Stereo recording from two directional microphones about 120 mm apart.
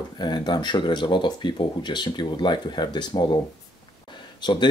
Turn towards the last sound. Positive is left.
turn(degrees=40)  # may be behind; listen again after turning